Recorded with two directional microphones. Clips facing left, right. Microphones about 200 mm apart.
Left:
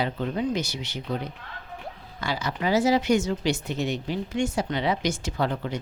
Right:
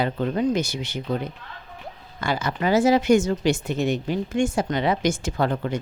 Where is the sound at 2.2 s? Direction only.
50° right (ahead or behind).